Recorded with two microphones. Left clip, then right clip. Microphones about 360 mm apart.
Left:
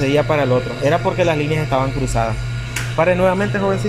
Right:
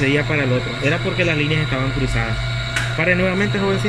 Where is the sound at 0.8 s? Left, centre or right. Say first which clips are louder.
Left 3 dB; left.